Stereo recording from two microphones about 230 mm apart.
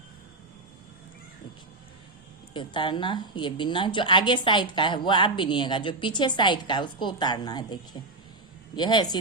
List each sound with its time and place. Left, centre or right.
2.5 s a woman's voice: left